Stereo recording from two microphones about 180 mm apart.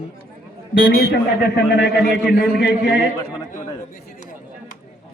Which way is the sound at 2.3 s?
60° left (ahead or behind).